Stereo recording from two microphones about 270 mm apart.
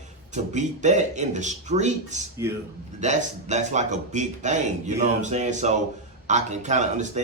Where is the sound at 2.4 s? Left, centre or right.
Centre.